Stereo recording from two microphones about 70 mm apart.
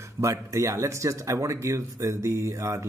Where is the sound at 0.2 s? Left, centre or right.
Right.